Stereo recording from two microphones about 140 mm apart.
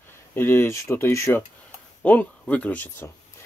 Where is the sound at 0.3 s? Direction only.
15° left (ahead or behind).